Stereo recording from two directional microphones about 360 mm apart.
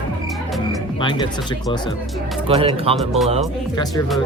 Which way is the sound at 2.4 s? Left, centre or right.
Centre.